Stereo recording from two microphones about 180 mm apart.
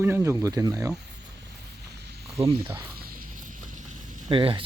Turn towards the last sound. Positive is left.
turn(degrees=-30)  # may be behind; listen again after turning